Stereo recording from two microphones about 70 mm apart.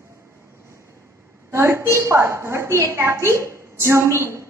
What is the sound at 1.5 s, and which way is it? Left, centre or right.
A woman's voice, right.